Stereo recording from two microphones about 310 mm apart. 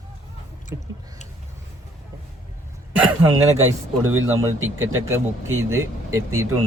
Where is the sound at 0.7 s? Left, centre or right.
Centre.